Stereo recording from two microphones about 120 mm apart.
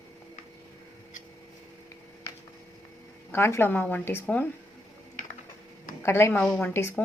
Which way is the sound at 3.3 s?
20° left (ahead or behind).